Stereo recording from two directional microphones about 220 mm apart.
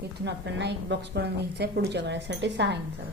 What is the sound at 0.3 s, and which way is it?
A woman's voice, 50° right (ahead or behind).